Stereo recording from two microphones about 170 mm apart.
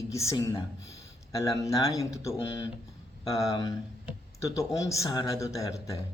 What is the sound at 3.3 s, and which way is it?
A man's voice, 20° left (ahead or behind).